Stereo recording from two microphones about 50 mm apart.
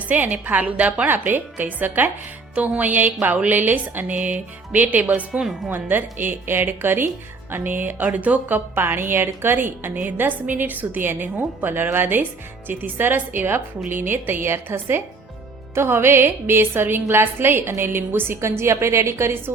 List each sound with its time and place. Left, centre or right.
0.1 s a woman's voice: right
1.0 s a woman's voice: right
5.4 s speech: centre
5.6 s a woman's voice: right